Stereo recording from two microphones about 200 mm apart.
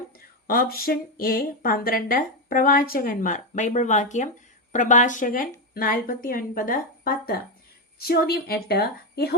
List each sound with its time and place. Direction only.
0.4 s speech: 45° left (ahead or behind)